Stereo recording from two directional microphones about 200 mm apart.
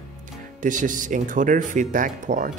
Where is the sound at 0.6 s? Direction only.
40° right (ahead or behind).